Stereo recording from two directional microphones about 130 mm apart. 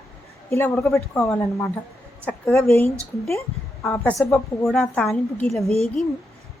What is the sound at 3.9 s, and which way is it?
Speech, 20° left (ahead or behind).